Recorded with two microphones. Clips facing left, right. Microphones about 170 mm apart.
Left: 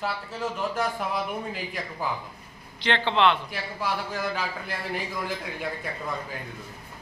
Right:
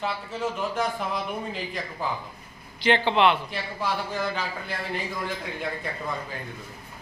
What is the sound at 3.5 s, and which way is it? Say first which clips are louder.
Speech: right 1 dB; 5° left (ahead or behind).